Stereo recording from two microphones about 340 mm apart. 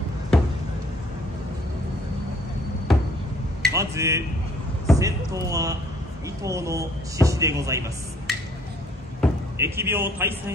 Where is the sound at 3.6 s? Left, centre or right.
Centre.